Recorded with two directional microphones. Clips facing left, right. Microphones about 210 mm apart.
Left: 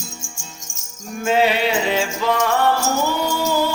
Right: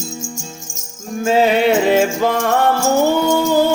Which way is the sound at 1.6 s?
50° right (ahead or behind).